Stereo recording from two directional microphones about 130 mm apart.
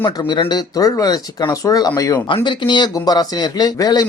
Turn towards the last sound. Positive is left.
turn(degrees=30)  # may be behind; listen again after turning